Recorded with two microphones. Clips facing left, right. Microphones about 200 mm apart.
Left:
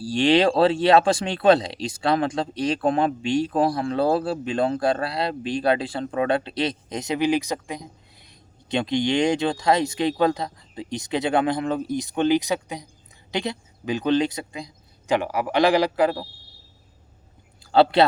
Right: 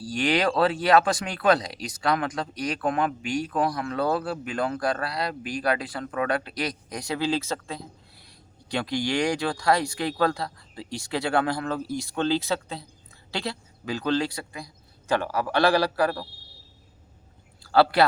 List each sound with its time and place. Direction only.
0.0 s speech: 30° left (ahead or behind)
17.6 s speech: 20° left (ahead or behind)